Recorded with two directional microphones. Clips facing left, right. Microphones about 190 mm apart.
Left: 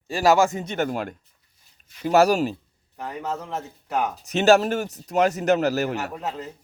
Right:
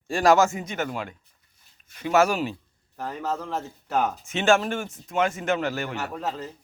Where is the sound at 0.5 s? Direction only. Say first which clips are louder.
Left 4 dB; 40° left (ahead or behind).